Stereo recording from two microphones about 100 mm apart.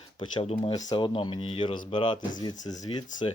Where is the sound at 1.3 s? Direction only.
65° left (ahead or behind); by 2.8 s 40° left (ahead or behind).